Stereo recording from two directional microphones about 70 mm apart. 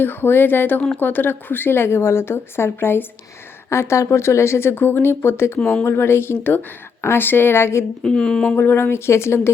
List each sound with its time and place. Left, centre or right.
0.0 s speech: left
5.5 s speech: centre
5.8 s speech: left
8.0 s speech: centre
8.5 s speech: left